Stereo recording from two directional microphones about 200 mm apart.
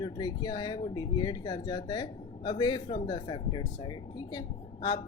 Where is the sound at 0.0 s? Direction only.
20° left (ahead or behind).